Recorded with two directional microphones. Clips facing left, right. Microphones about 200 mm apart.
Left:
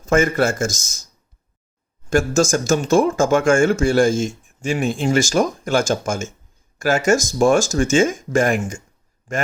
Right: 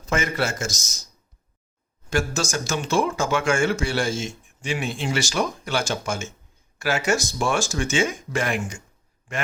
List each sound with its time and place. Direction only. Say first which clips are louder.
0.0 s speech: left 8 dB; 50° left (ahead or behind)
2.0 s speech: left 8 dB; 45° left (ahead or behind)